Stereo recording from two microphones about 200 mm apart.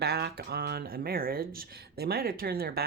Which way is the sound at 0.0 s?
55° right (ahead or behind).